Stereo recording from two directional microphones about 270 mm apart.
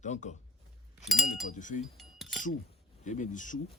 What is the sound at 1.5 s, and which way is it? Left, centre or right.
Speech, left.